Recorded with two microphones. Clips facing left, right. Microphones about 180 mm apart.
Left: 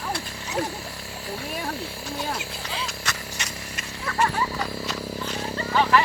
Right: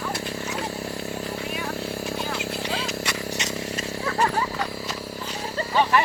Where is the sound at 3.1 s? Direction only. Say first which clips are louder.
Right 5 dB; 20° right (ahead or behind).